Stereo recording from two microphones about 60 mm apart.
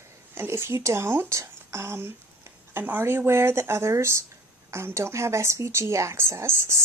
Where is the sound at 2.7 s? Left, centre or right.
Right.